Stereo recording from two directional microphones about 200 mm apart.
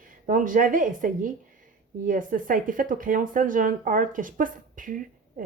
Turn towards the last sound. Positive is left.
turn(degrees=-40)  # may be behind; listen again after turning